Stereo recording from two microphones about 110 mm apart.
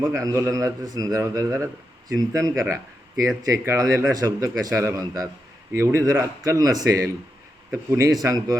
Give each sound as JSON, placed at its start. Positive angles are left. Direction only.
{"t": 0.1, "sound": "a man's voice", "side_deg": -25}